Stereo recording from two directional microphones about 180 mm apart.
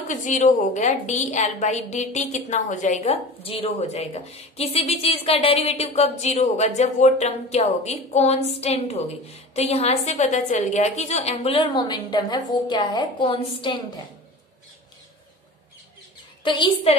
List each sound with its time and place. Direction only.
0.1 s a woman's voice: 45° left (ahead or behind)
11.6 s a woman's voice: 25° left (ahead or behind)
16.4 s a woman's voice: 25° left (ahead or behind)